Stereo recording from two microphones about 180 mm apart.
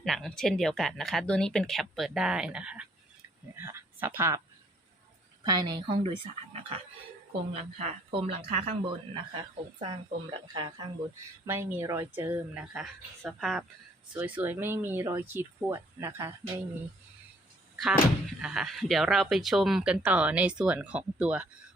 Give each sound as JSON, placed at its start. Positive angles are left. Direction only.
{"t": 0.0, "sound": "speech", "side_deg": 0}
{"t": 5.5, "sound": "speech", "side_deg": -20}
{"t": 6.6, "sound": "a sound", "side_deg": -35}
{"t": 7.5, "sound": "speech", "side_deg": -35}
{"t": 11.4, "sound": "speech", "side_deg": -15}
{"t": 18.4, "sound": "speech", "side_deg": -5}